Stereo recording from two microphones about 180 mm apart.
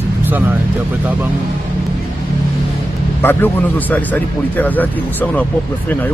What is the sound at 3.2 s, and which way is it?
Speech, 10° left (ahead or behind).